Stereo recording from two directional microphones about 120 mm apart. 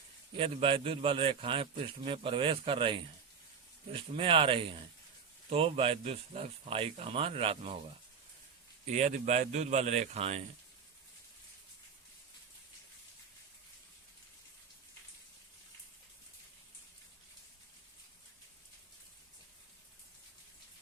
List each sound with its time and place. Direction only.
0.3 s a man's voice: 50° right (ahead or behind)
8.9 s a man's voice: 75° right (ahead or behind); by 10.4 s 60° right (ahead or behind)